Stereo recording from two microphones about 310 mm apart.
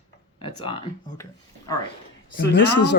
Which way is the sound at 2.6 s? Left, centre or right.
Left.